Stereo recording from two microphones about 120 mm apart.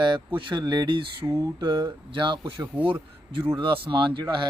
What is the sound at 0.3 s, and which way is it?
A man's voice, 40° right (ahead or behind).